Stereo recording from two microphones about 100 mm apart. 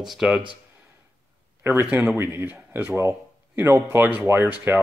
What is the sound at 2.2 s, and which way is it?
Speech, 25° right (ahead or behind).